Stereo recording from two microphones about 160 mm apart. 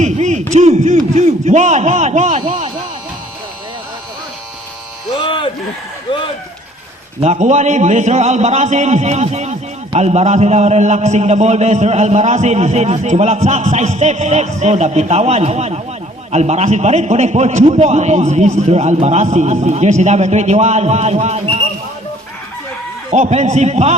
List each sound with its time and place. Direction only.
0.0 s a man's voice: 45° right (ahead or behind)
5.1 s a sound: 30° left (ahead or behind)
6.1 s speech: 30° left (ahead or behind)
7.2 s a man's voice: 45° right (ahead or behind)
23.1 s a man's voice: 45° right (ahead or behind)